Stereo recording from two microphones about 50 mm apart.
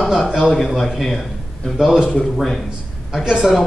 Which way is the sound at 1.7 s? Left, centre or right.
Centre.